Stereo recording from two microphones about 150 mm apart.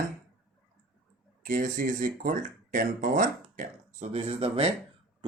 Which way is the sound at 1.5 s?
65° right (ahead or behind).